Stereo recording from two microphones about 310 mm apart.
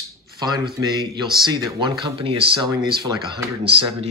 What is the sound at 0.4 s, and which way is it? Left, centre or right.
Speech, centre.